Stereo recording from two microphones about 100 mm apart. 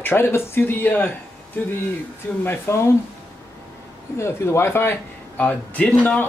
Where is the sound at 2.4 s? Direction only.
25° left (ahead or behind).